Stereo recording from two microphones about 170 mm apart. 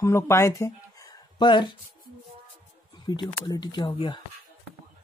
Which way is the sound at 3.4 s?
25° left (ahead or behind).